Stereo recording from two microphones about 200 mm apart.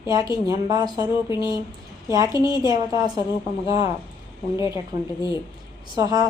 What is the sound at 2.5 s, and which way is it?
Speech, 20° right (ahead or behind).